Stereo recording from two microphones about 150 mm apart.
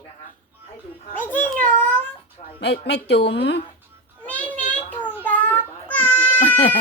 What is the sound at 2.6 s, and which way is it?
Speech, 90° left.